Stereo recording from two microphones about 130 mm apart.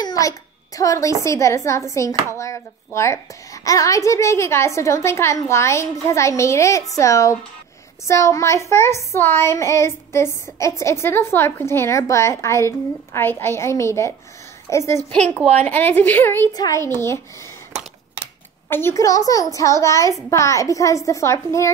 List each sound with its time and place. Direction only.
0.0 s a sound: 30° left (ahead or behind)
1.2 s a child's voice: 25° left (ahead or behind)
15.0 s speech: 10° left (ahead or behind)
16.5 s a child's voice: 25° left (ahead or behind)
18.7 s a child's voice: 20° left (ahead or behind)